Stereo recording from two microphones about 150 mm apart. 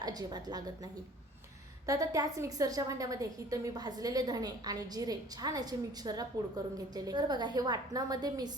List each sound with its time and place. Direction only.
0.0 s a woman's voice: 25° right (ahead or behind)
1.9 s a woman's voice: 25° right (ahead or behind)